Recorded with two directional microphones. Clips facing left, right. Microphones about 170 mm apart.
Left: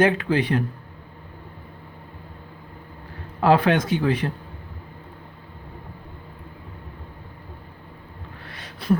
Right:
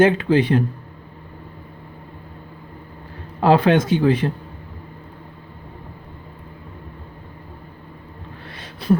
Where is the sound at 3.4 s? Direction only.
25° right (ahead or behind).